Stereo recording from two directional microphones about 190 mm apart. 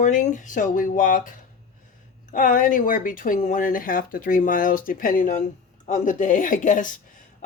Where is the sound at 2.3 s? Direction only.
45° left (ahead or behind).